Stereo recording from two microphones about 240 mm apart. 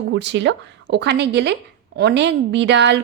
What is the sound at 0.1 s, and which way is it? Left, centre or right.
A woman's voice, right.